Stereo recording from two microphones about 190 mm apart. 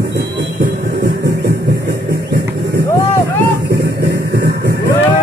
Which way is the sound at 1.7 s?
60° right (ahead or behind).